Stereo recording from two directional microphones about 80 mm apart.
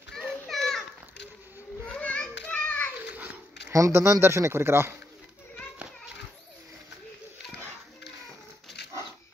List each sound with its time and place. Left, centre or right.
0.1 s children playing: centre
2.0 s children playing: centre
3.6 s speech: right